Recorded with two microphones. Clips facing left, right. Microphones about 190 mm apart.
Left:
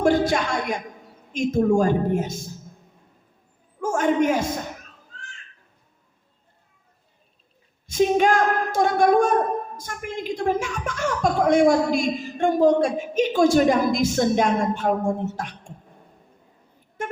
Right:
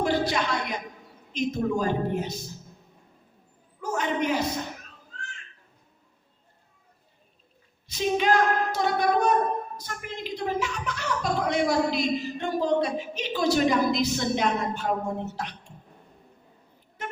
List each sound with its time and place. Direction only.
0.0 s a man's voice: 50° left (ahead or behind)
3.8 s a man's voice: 45° left (ahead or behind)
7.9 s a woman's voice: 45° left (ahead or behind)
17.0 s vehicle horn: 45° left (ahead or behind)